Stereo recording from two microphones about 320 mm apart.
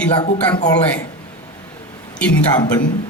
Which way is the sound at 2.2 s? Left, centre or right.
Centre.